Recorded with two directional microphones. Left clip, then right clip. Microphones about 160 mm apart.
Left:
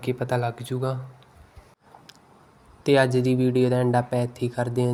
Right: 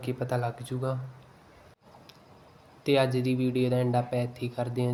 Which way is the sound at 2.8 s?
30° left (ahead or behind).